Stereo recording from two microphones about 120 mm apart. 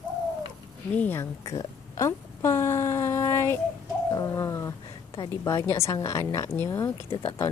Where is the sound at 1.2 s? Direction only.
30° left (ahead or behind).